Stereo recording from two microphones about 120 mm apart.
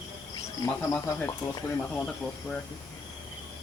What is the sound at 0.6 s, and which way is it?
Speech, 25° left (ahead or behind).